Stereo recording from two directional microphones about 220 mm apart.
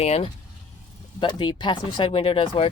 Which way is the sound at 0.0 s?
30° left (ahead or behind).